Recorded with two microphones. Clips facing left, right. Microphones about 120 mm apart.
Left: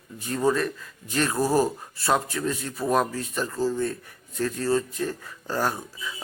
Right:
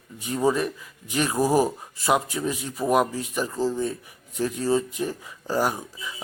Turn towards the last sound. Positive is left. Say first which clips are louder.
# right 1 dB
turn(degrees=-15)  # may be behind; listen again after turning